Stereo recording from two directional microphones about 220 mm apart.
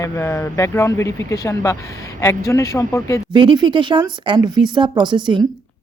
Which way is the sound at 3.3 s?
20° right (ahead or behind).